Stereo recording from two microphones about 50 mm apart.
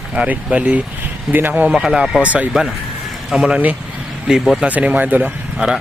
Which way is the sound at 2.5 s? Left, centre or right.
Centre.